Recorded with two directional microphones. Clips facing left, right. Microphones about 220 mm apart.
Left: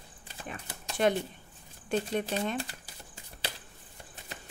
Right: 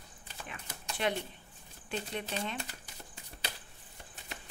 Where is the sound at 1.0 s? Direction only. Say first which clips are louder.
Left 7 dB; 45° left (ahead or behind).